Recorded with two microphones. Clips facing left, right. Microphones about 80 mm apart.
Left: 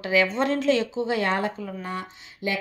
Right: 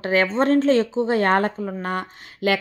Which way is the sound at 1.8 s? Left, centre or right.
Right.